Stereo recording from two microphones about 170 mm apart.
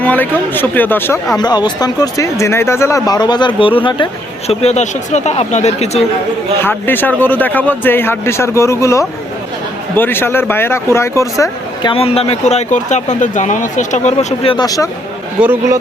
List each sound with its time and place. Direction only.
0.0 s a man's voice: 10° left (ahead or behind)
1.4 s speech: 25° left (ahead or behind)
6.6 s a man's voice: 10° left (ahead or behind)
11.9 s speech: 35° left (ahead or behind)
14.5 s speech: 20° left (ahead or behind)